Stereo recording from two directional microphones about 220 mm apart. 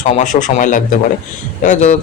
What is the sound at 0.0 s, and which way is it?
A man's voice, 35° left (ahead or behind).